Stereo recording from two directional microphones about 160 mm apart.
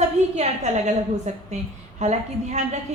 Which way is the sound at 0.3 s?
45° right (ahead or behind).